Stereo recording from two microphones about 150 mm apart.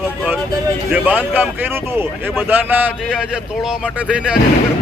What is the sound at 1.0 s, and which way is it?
A man's voice, 10° right (ahead or behind).